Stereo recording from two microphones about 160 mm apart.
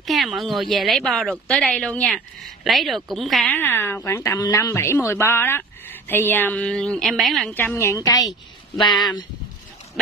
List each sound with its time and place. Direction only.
0.0 s a woman's voice: centre (ahead or behind)
3.5 s a woman's voice: 15° left (ahead or behind)
7.5 s a woman's voice: 15° left (ahead or behind)